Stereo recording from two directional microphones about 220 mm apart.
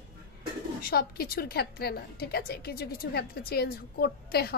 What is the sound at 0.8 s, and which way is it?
A woman's voice, 45° left (ahead or behind).